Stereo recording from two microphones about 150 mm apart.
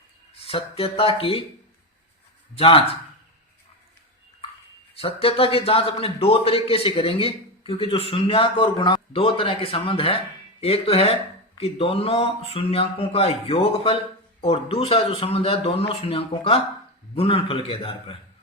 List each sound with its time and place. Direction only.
0.4 s a man's voice: 40° left (ahead or behind)
2.6 s a man's voice: 40° left (ahead or behind)
4.9 s a man's voice: 40° left (ahead or behind)